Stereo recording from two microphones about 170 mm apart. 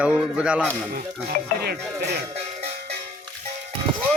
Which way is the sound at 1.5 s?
70° right (ahead or behind).